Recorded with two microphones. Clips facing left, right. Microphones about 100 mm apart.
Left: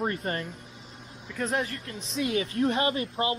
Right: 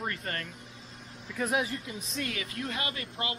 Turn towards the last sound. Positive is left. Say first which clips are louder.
# left 9 dB
turn(degrees=30)  # may be behind; listen again after turning